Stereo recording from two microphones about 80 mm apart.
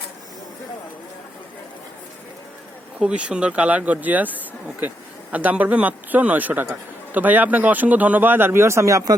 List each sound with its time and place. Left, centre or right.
3.0 s speech: centre; by 9.1 s right